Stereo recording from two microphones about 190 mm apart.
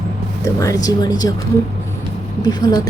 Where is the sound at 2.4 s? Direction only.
20° left (ahead or behind).